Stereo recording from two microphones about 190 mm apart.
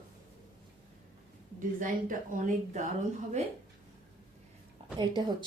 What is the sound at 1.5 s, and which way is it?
Speech, 45° right (ahead or behind).